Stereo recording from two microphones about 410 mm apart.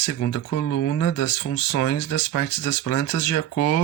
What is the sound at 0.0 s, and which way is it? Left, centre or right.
Speech, left.